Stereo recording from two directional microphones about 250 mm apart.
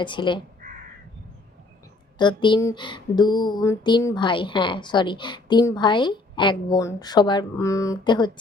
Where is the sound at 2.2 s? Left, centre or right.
Centre.